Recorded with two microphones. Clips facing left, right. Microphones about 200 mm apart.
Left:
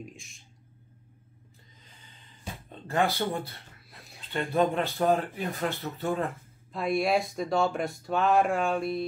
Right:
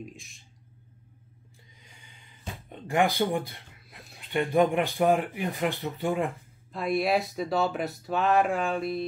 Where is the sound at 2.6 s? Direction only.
15° right (ahead or behind).